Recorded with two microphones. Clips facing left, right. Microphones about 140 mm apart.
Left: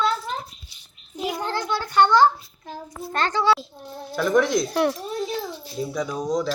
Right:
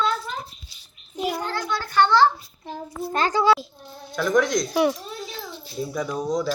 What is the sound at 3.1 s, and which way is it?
Speech, 10° right (ahead or behind).